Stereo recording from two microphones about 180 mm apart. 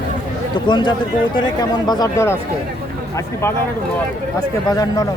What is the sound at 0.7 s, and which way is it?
Speech, 25° left (ahead or behind).